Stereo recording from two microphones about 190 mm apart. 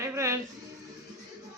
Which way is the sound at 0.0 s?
15° right (ahead or behind).